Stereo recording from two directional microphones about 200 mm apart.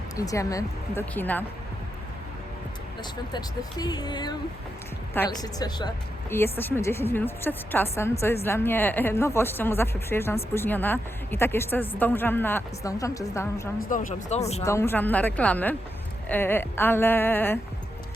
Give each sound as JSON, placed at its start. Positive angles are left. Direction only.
{"t": 0.2, "sound": "speech", "side_deg": 15}
{"t": 3.0, "sound": "speech", "side_deg": 20}
{"t": 13.9, "sound": "speech", "side_deg": 35}
{"t": 14.6, "sound": "speech", "side_deg": 15}